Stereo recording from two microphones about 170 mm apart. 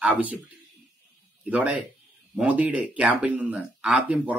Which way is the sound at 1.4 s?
10° right (ahead or behind).